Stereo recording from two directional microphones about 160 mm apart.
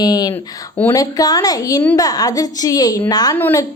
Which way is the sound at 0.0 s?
25° left (ahead or behind).